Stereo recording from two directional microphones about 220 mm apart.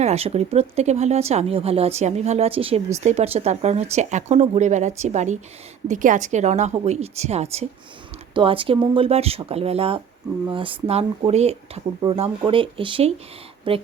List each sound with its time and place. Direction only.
0.0 s speech: 30° right (ahead or behind)